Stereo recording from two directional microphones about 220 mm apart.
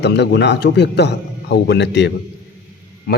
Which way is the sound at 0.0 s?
50° left (ahead or behind).